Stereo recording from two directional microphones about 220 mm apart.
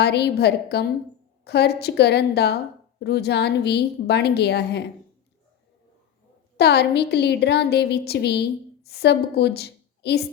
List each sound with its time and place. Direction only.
0.0 s a woman's voice: 50° left (ahead or behind)
6.6 s a woman's voice: 50° left (ahead or behind)